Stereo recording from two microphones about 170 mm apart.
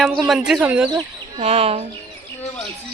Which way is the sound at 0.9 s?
25° right (ahead or behind).